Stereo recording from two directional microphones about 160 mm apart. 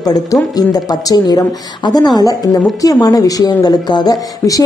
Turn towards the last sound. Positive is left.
turn(degrees=25)  # may be behind; listen again after turning